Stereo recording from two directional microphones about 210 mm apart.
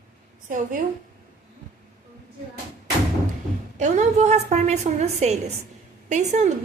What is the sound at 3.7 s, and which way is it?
A woman's voice, 35° right (ahead or behind).